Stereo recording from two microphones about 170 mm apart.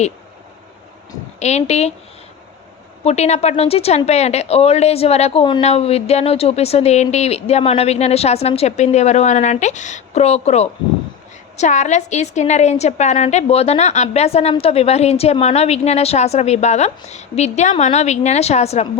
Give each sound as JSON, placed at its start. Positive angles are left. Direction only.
{"t": 1.4, "sound": "a woman's voice", "side_deg": 40}
{"t": 3.0, "sound": "a woman's voice", "side_deg": 40}